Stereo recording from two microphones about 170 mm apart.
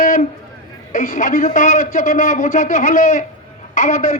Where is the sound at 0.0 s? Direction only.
50° left (ahead or behind).